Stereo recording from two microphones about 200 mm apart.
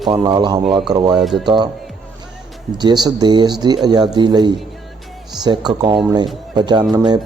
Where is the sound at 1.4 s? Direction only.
20° right (ahead or behind).